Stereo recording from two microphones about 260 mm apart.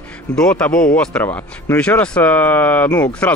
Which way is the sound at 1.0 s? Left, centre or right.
Centre.